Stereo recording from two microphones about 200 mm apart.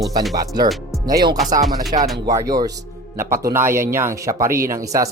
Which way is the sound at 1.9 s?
35° right (ahead or behind).